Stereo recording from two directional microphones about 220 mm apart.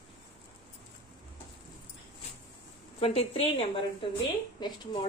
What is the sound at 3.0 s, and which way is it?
Speech, 25° left (ahead or behind).